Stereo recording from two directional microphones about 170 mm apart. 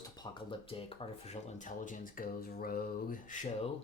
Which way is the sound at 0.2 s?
30° left (ahead or behind).